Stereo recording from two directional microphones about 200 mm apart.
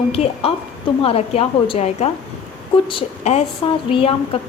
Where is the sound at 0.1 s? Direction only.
30° left (ahead or behind).